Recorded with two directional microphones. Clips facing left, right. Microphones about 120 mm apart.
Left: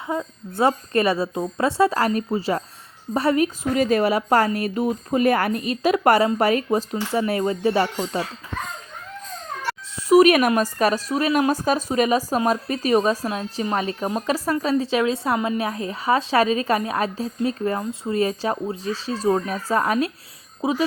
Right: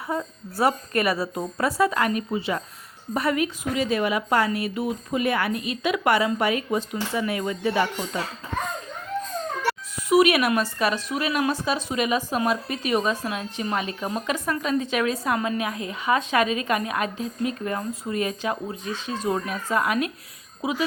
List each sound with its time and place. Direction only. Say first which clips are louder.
0.5 s a woman's voice: left 3 dB; 25° left (ahead or behind)
10.1 s a woman's voice: left 4 dB; 40° left (ahead or behind)